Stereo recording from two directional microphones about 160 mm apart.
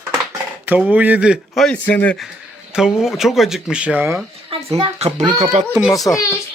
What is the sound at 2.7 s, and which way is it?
Speech, 5° right (ahead or behind).